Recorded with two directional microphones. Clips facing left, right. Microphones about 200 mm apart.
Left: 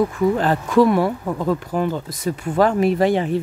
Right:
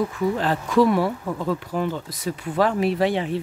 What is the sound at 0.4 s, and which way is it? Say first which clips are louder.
Speech: left 2 dB; 50° left (ahead or behind).